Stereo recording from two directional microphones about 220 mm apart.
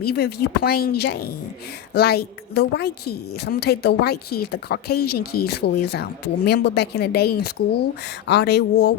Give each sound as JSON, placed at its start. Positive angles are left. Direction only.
{"t": 0.0, "sound": "a woman's voice", "side_deg": 45}